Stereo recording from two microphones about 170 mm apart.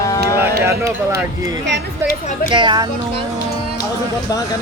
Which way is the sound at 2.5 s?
25° right (ahead or behind).